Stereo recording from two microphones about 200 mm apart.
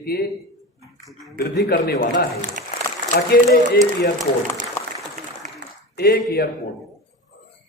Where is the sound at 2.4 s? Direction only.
40° right (ahead or behind).